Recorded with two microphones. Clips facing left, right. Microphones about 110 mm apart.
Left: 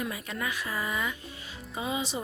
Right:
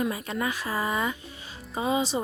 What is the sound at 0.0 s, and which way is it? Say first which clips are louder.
Speech: right 6 dB; 30° right (ahead or behind).